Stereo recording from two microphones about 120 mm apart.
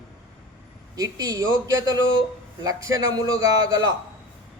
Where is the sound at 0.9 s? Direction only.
30° right (ahead or behind).